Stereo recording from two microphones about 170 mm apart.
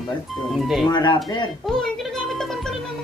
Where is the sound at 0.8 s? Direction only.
25° left (ahead or behind).